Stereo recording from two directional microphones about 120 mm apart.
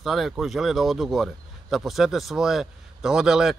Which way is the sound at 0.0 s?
Centre (ahead or behind).